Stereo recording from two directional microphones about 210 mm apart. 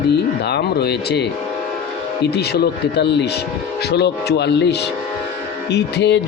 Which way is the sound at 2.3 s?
50° left (ahead or behind).